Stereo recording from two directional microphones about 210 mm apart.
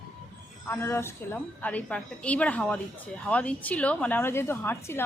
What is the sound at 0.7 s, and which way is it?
A woman's voice, 10° left (ahead or behind).